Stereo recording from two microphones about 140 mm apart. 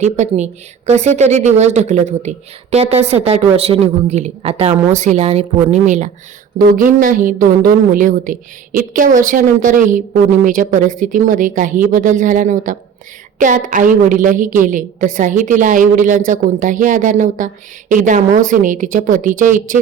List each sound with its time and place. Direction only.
0.0 s a woman's voice: 55° right (ahead or behind)
4.9 s a woman's voice: 60° right (ahead or behind)
6.6 s a woman's voice: 75° right (ahead or behind)